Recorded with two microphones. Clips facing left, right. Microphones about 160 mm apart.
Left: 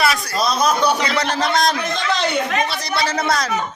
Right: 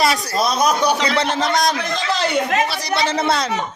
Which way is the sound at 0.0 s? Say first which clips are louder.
Right 1 dB; 25° right (ahead or behind).